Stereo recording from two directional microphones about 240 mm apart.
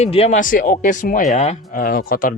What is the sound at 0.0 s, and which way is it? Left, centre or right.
Speech, left.